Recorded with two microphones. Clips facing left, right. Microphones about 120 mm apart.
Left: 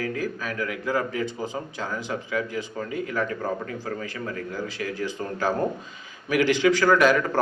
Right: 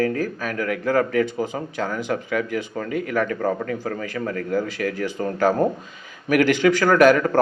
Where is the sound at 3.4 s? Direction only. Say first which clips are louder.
Right 6 dB; 50° right (ahead or behind).